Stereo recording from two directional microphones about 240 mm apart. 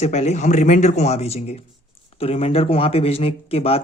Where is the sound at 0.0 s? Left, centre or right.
Left.